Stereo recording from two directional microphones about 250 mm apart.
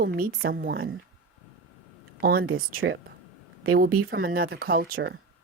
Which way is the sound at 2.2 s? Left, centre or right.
Right.